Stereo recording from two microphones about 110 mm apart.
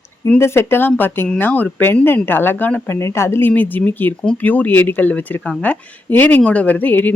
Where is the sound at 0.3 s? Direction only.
25° left (ahead or behind).